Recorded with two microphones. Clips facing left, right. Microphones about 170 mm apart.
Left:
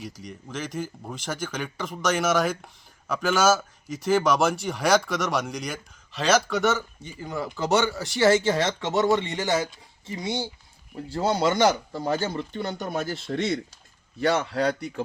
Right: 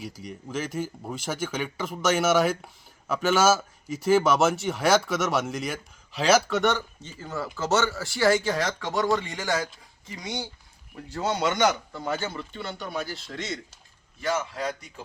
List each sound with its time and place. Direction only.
0.0 s a man's voice: 5° right (ahead or behind); by 15.0 s 65° left (ahead or behind)